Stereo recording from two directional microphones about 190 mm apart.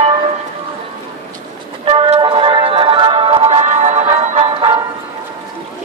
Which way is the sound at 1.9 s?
30° right (ahead or behind).